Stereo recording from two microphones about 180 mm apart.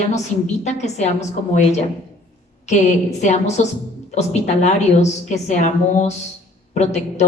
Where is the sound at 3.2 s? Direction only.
40° left (ahead or behind).